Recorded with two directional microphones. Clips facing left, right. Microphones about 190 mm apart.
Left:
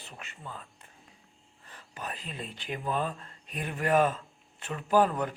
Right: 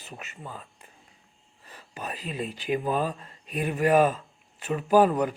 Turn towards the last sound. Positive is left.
turn(degrees=-15)  # may be behind; listen again after turning